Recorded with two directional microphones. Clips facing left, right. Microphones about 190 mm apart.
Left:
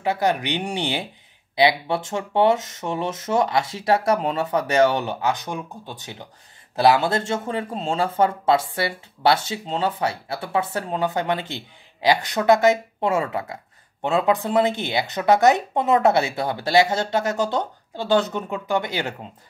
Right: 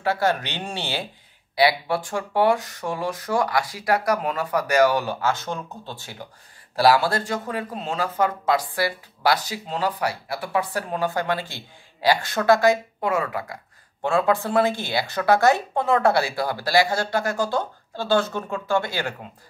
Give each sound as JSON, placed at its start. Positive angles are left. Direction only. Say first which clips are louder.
{"t": 0.0, "sound": "speech", "louder": "left 1 dB", "side_deg": 20}